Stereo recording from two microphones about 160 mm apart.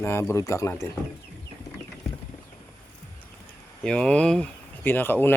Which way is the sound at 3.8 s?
5° left (ahead or behind).